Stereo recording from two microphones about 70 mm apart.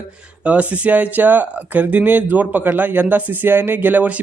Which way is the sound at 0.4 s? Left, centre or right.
Centre.